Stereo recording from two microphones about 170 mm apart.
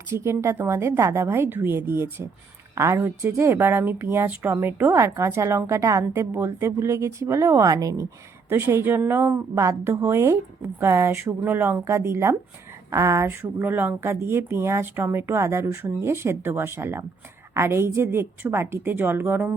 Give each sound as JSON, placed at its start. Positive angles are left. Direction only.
{"t": 0.1, "sound": "a woman's voice", "side_deg": -15}